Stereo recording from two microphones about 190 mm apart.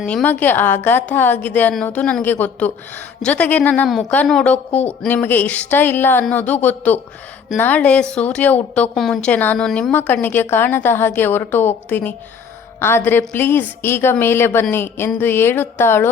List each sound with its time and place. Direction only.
0.0 s a woman's voice: 5° left (ahead or behind)